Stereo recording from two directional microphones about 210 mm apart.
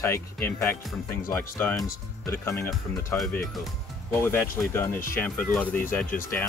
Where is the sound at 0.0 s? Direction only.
10° left (ahead or behind).